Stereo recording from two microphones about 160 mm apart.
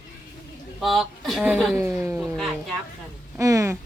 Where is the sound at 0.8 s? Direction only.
Centre (ahead or behind).